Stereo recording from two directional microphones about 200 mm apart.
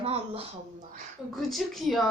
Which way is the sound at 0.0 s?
30° right (ahead or behind).